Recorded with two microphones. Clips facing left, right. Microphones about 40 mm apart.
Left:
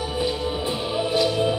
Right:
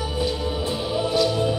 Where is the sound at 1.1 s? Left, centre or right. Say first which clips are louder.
Left 1 dB; centre.